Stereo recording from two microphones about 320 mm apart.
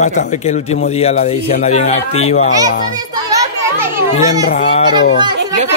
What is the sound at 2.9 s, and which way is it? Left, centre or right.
Children playing, centre.